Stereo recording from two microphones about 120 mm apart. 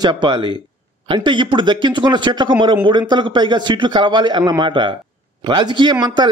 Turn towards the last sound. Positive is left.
turn(degrees=-40)  # may be behind; listen again after turning